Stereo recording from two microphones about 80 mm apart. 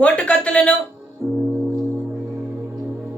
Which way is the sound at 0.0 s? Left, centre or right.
Centre.